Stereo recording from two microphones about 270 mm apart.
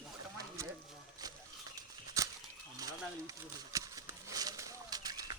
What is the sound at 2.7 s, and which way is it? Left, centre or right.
Speech, centre.